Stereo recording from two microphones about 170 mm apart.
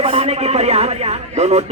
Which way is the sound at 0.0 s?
35° right (ahead or behind).